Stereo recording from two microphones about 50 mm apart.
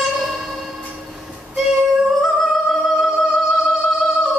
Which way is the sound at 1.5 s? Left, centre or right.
Centre.